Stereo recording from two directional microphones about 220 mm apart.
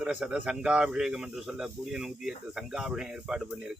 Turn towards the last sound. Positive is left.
turn(degrees=-5)  # may be behind; listen again after turning